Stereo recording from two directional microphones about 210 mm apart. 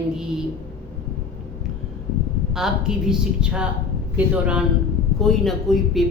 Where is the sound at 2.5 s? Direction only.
5° right (ahead or behind).